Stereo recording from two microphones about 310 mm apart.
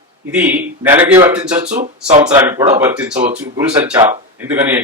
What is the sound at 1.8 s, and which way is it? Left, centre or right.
Speech, right.